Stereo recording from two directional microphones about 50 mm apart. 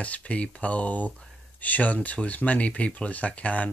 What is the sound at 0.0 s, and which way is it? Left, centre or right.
Speech, left.